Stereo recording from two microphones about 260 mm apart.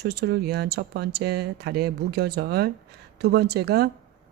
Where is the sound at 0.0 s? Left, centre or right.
Right.